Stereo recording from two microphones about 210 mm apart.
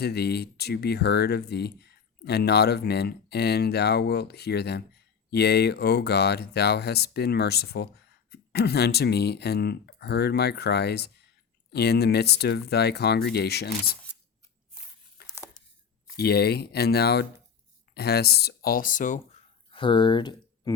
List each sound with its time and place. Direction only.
0.0 s speech: 50° left (ahead or behind)
15.2 s a sound: 45° left (ahead or behind)
16.1 s speech: 50° left (ahead or behind)
19.7 s speech: 25° left (ahead or behind)